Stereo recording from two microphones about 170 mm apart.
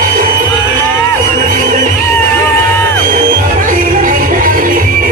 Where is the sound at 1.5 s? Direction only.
55° right (ahead or behind).